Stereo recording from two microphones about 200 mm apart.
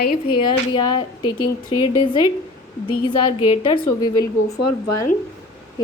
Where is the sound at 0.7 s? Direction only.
20° left (ahead or behind).